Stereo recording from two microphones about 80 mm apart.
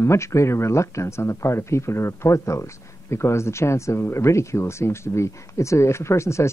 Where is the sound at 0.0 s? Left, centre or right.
Left.